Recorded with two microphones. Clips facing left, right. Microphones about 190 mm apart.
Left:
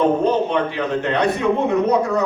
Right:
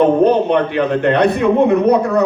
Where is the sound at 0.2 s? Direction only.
60° right (ahead or behind).